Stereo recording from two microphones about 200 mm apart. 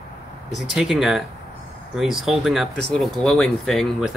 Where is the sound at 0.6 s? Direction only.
Centre (ahead or behind).